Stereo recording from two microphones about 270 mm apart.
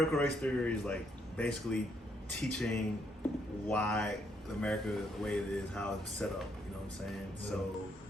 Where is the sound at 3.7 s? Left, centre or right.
Centre.